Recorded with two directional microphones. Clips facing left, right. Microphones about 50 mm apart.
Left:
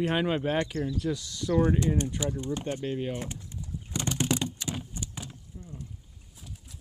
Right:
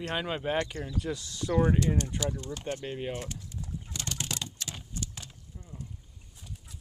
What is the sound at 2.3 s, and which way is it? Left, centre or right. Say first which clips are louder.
Speech: left 6 dB; left.